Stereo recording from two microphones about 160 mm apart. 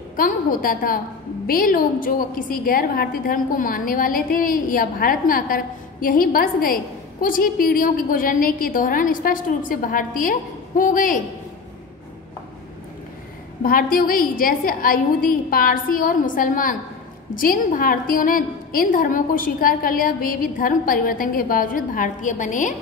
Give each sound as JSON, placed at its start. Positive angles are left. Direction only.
{"t": 0.1, "sound": "a woman's voice", "side_deg": 60}
{"t": 13.6, "sound": "a woman's voice", "side_deg": 65}